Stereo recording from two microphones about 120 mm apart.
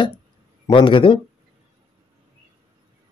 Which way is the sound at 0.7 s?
45° left (ahead or behind).